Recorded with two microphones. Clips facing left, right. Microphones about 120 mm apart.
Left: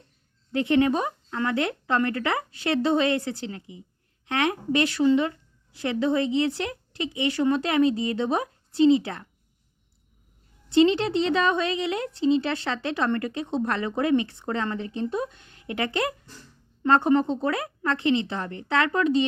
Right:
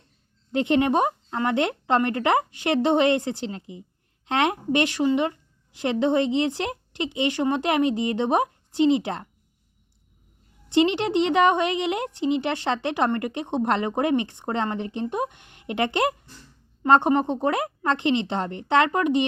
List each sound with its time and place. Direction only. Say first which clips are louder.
0.7 s speech: right 1 dB; 20° right (ahead or behind)
10.7 s speech: left 1 dB; 20° right (ahead or behind)